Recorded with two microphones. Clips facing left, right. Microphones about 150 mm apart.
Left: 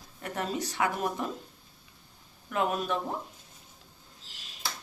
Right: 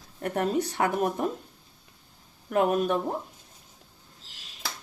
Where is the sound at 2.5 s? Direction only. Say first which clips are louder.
Right 6 dB; 50° right (ahead or behind).